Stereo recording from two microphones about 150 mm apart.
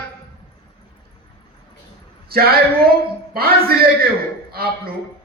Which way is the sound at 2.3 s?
90° right.